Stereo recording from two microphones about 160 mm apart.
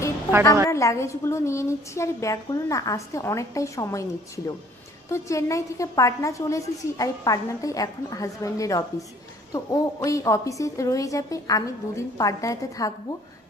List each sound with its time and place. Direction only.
0.7 s a woman's voice: 20° left (ahead or behind)
5.0 s a woman's voice: 15° left (ahead or behind)